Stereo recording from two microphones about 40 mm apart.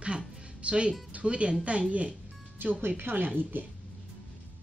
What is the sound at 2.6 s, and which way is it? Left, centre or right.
A woman's voice, right.